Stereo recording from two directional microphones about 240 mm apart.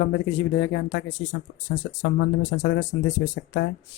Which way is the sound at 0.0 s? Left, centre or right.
Left.